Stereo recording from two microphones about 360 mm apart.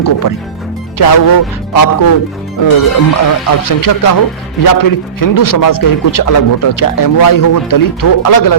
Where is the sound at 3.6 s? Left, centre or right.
Left.